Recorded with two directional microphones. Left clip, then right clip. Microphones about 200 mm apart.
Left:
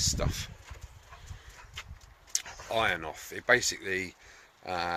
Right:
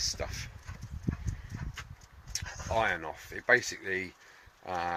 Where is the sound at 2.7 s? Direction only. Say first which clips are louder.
Left 1 dB; 10° left (ahead or behind).